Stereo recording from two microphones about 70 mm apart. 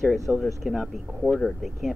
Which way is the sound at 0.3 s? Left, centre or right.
Centre.